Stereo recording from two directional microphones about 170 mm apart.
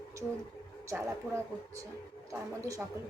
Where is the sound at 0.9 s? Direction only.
15° right (ahead or behind).